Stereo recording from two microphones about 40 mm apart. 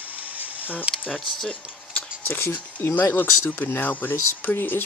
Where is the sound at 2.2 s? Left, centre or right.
Left.